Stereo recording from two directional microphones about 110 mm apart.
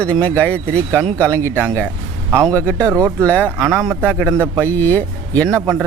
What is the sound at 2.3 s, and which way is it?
Speech, 30° right (ahead or behind).